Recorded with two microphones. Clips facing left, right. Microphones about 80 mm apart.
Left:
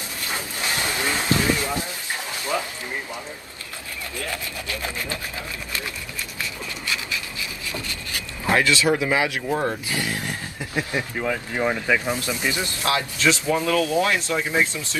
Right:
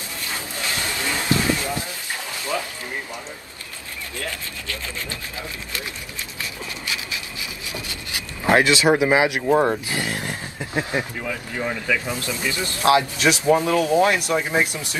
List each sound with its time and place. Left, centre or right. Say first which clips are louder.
0.3 s a sound: left 1 dB; left
4.3 s wood: left 2 dB; left
8.5 s speech: right 3 dB; right
11.2 s speech: left 3 dB; left
12.1 s wood: left 1 dB; left
12.8 s speech: right 5 dB; right